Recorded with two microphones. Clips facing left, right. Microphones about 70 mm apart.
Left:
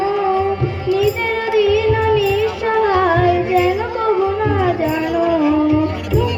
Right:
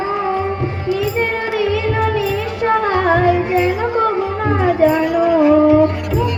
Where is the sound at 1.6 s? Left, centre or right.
Right.